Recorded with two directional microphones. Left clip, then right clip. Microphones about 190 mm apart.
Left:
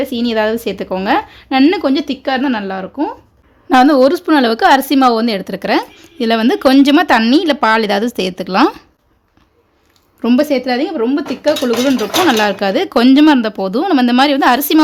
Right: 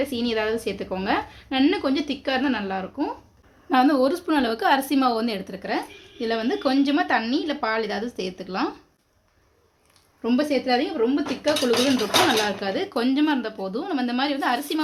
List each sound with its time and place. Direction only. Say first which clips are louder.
0.0 s a woman's voice: left 9 dB; 40° left (ahead or behind)
5.5 s speech: left 12 dB; 55° left (ahead or behind)
10.2 s a woman's voice: left 10 dB; 55° left (ahead or behind)